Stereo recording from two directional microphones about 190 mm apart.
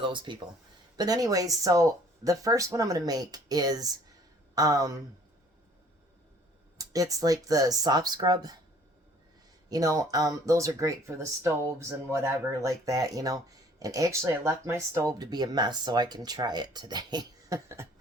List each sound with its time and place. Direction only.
0.0 s speech: 25° right (ahead or behind)
6.7 s speech: 20° right (ahead or behind)
9.6 s speech: 20° right (ahead or behind)